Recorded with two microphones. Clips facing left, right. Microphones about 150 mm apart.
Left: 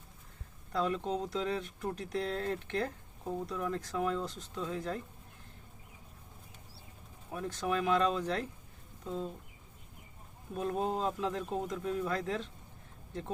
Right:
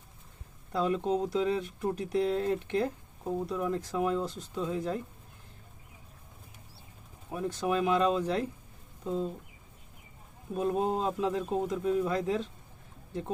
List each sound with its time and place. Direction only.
0.7 s speech: 15° right (ahead or behind)
7.3 s a man's voice: 15° right (ahead or behind)
10.5 s a man's voice: 20° right (ahead or behind)